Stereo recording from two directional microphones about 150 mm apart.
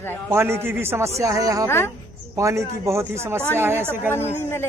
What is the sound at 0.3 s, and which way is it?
Speech, 15° right (ahead or behind).